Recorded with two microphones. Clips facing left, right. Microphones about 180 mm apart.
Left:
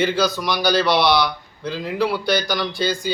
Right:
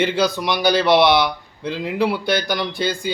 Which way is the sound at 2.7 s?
55° right (ahead or behind).